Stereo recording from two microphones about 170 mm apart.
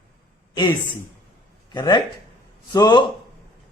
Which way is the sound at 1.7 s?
25° left (ahead or behind).